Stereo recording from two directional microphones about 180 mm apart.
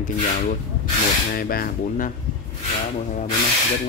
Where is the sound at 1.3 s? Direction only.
55° left (ahead or behind).